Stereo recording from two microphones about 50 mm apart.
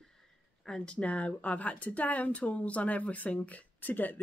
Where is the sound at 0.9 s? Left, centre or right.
Left.